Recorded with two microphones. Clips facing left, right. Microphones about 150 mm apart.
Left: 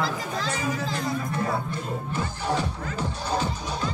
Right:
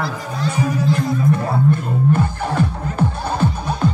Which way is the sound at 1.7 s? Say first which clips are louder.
Right 14 dB; 55° right (ahead or behind).